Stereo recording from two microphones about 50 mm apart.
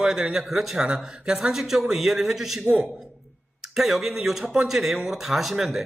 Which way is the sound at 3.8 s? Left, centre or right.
Centre.